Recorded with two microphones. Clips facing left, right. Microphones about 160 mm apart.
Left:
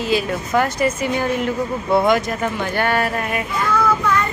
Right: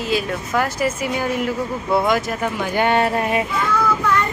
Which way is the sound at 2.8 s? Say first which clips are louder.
Right 4 dB; 25° right (ahead or behind).